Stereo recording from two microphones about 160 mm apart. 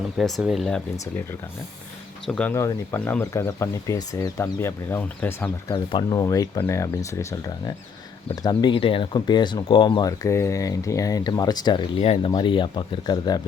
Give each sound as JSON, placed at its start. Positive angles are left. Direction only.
{"t": 0.2, "sound": "speech", "side_deg": 0}
{"t": 2.2, "sound": "speech", "side_deg": 5}
{"t": 2.5, "sound": "speech", "side_deg": 15}
{"t": 5.7, "sound": "speech", "side_deg": 30}